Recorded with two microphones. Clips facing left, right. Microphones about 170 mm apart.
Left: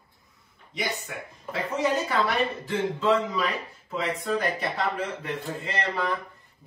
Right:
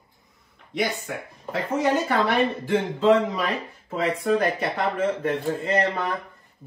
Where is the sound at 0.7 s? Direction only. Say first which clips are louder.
Right 5 dB; 60° right (ahead or behind).